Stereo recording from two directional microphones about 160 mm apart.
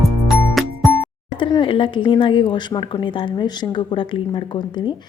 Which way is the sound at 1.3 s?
30° left (ahead or behind).